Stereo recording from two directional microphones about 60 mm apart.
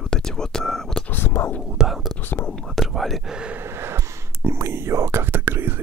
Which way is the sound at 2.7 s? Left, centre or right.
Centre.